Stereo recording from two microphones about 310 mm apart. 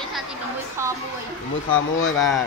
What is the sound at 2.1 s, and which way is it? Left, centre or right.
Speech, centre.